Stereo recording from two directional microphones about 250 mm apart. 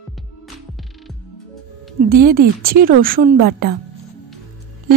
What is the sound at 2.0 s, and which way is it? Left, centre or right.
A woman's voice, right.